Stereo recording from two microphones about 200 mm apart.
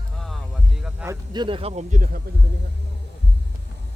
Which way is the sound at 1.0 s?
20° right (ahead or behind).